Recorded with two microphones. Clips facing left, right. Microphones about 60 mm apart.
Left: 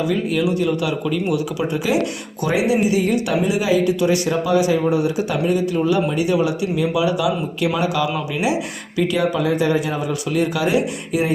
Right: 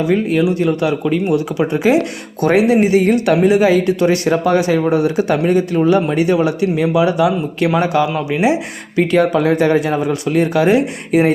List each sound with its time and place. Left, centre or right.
0.1 s speech: right